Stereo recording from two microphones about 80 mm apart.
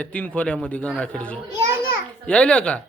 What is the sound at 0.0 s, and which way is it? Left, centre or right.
A man's voice, centre.